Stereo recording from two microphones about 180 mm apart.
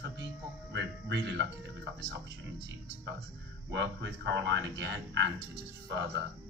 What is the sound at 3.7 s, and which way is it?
Speech, 75° right (ahead or behind).